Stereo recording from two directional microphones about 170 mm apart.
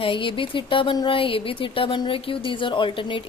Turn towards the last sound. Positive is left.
turn(degrees=30)  # may be behind; listen again after turning